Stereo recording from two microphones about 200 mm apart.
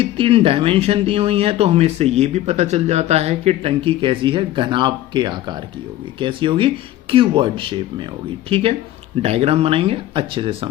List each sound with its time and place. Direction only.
0.0 s speech: 30° right (ahead or behind)